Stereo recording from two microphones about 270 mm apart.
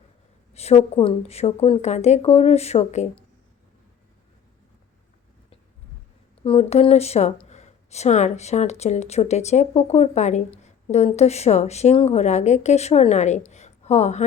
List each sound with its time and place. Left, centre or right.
0.5 s speech: left
6.4 s a woman's voice: left